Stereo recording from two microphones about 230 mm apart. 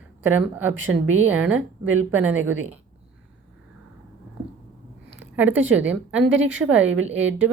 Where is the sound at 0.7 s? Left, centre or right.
Right.